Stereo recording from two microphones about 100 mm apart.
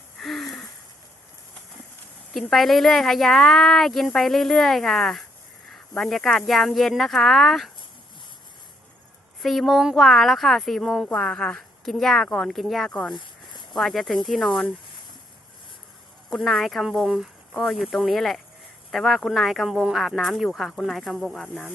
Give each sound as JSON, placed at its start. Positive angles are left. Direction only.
{"t": 0.2, "sound": "wheeze", "side_deg": 0}
{"t": 2.3, "sound": "speech", "side_deg": 0}
{"t": 9.4, "sound": "speech", "side_deg": 0}
{"t": 13.1, "sound": "a sound", "side_deg": 50}
{"t": 13.7, "sound": "speech", "side_deg": 0}
{"t": 16.3, "sound": "speech", "side_deg": 0}
{"t": 21.4, "sound": "speech", "side_deg": 15}